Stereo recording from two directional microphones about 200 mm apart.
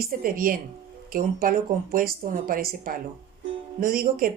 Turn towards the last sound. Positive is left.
turn(degrees=-45)  # may be behind; listen again after turning